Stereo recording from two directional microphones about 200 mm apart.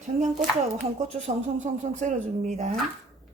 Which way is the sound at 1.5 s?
35° right (ahead or behind).